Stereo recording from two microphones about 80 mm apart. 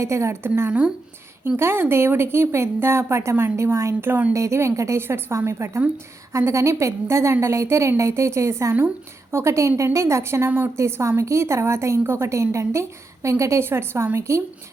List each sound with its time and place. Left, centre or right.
0.0 s a woman's voice: right
0.7 s speech: centre
1.5 s a woman's voice: right